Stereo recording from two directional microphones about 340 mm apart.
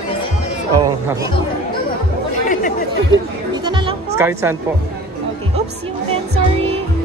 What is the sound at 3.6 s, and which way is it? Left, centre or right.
Music, centre.